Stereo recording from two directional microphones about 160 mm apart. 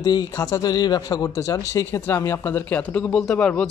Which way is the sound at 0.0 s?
25° left (ahead or behind).